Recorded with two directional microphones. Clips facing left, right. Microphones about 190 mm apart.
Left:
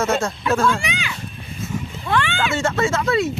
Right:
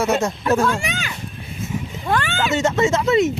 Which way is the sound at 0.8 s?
45° right (ahead or behind).